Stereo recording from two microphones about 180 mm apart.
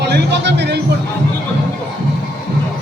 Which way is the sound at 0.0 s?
70° right (ahead or behind).